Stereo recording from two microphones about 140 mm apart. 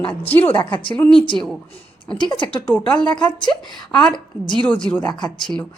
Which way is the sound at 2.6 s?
10° left (ahead or behind).